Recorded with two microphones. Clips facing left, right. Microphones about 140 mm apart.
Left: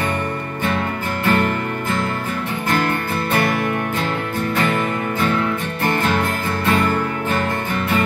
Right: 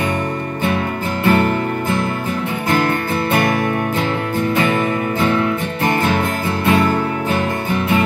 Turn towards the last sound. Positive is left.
turn(degrees=-10)  # may be behind; listen again after turning